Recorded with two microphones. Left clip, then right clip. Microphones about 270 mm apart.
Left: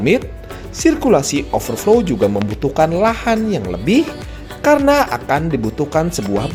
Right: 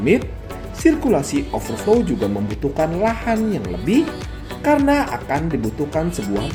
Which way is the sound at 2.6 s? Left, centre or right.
Left.